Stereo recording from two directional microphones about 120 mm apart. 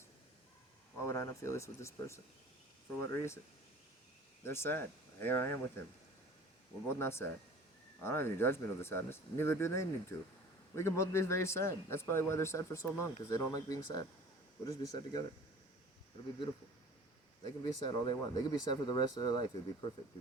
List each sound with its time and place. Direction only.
1.0 s a man's voice: 25° left (ahead or behind)
4.4 s a man's voice: 20° left (ahead or behind)
6.8 s a man's voice: 20° left (ahead or behind)
17.6 s speech: 40° left (ahead or behind)